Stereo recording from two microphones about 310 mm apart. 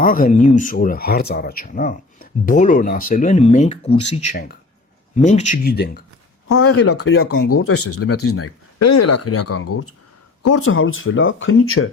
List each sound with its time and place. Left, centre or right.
0.0 s speech: left
6.5 s speech: left